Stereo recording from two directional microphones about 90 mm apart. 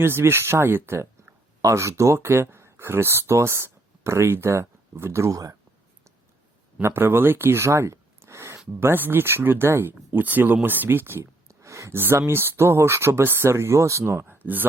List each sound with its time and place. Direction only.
0.0 s speech: 25° right (ahead or behind)
6.8 s speech: 25° right (ahead or behind)